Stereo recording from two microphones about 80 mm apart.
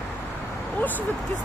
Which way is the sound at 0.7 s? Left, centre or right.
Left.